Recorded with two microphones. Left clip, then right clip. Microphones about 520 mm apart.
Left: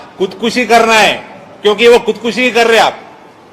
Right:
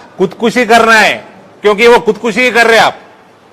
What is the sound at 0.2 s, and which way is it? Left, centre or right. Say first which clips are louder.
Speech: right 3 dB; right.